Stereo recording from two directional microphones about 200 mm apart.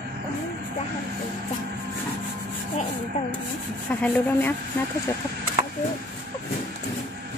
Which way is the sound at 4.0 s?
10° left (ahead or behind).